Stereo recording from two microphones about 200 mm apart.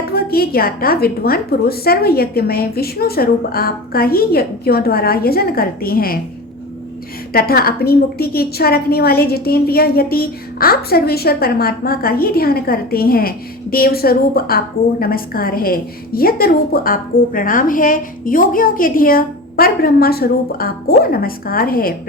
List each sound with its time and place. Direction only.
0.1 s a woman's voice: 50° left (ahead or behind)
7.3 s a woman's voice: 50° left (ahead or behind)